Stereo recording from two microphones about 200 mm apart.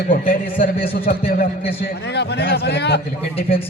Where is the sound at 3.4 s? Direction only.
30° left (ahead or behind).